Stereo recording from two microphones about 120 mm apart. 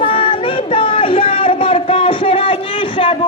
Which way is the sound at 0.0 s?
50° left (ahead or behind).